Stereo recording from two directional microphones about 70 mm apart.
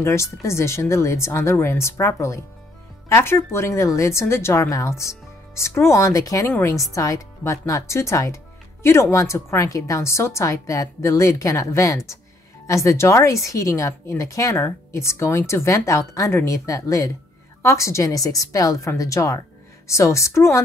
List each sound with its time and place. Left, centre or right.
0.0 s a woman's voice: left